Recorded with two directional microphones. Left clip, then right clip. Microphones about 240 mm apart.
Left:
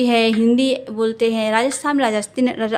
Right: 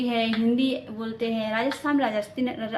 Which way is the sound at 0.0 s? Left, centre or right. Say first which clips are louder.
Left 9 dB; left.